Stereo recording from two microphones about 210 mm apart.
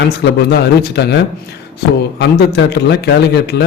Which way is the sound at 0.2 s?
55° left (ahead or behind).